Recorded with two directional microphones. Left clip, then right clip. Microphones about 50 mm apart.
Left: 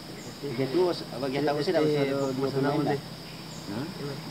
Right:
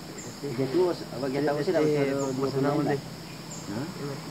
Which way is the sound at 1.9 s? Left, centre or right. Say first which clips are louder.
Even; centre.